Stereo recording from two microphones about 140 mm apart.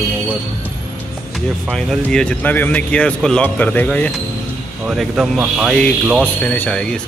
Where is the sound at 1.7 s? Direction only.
5° left (ahead or behind).